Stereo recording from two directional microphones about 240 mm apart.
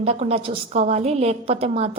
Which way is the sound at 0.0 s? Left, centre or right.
Right.